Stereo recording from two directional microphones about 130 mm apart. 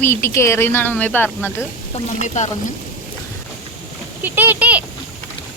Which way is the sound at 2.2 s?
65° left (ahead or behind).